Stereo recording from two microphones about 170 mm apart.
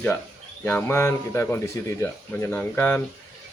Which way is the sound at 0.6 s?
10° left (ahead or behind).